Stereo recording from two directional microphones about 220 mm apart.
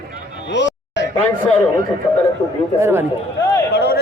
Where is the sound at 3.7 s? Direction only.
50° left (ahead or behind).